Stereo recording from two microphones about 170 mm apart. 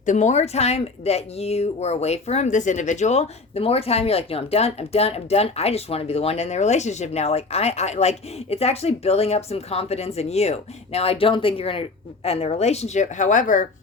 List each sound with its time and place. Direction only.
0.0 s speech: 45° left (ahead or behind)